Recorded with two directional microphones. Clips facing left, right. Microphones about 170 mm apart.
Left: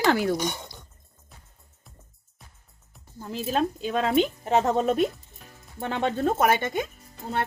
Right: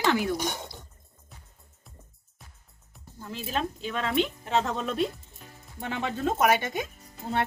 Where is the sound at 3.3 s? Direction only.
40° left (ahead or behind).